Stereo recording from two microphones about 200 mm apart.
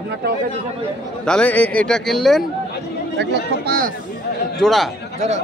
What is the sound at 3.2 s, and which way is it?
Speech, 55° right (ahead or behind).